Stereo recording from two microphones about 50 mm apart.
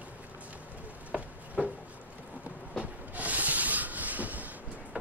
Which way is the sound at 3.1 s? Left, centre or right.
Right.